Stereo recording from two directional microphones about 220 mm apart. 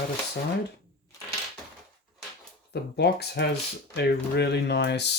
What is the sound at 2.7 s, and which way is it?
Speech, 50° left (ahead or behind).